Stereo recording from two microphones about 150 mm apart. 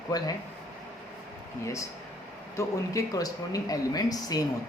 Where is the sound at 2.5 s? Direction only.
20° left (ahead or behind).